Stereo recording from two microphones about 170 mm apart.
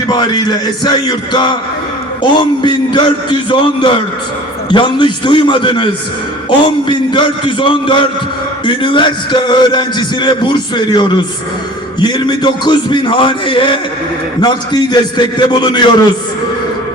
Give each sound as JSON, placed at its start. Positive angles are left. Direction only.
{"t": 0.1, "sound": "a man's voice", "side_deg": 25}